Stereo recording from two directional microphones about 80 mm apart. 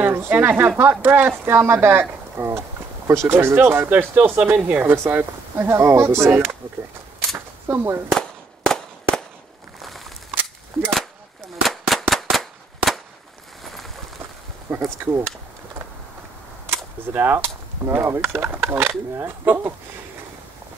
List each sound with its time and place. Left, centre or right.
0.0 s speech: right
7.3 s camera: right
8.1 s a sound: centre
11.6 s gunshot: centre
12.1 s a sound: centre
14.8 s speech: right
17.1 s speech: right